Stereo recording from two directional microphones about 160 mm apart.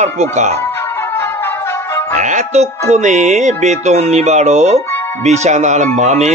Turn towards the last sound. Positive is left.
turn(degrees=-45)  # may be behind; listen again after turning